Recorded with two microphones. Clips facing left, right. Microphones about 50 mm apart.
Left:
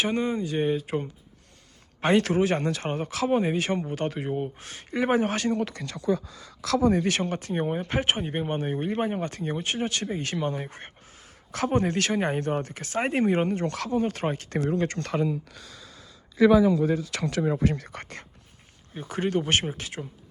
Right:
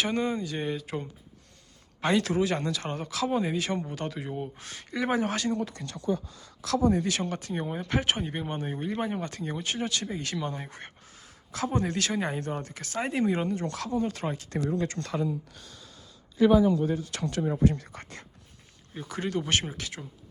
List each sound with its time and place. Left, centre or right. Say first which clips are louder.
0.0 s speech: left 2 dB; centre
2.0 s speech: left 3 dB; left
5.5 s speech: left 3 dB; left
6.9 s speech: left 3 dB; left
7.2 s speech: left 4 dB; left
11.5 s speech: left 4 dB; left
14.1 s speech: left 4 dB; left
16.8 s speech: left 4 dB; left
19.0 s speech: left 5 dB; left